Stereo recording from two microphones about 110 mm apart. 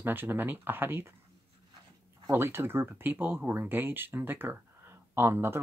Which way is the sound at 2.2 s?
20° right (ahead or behind).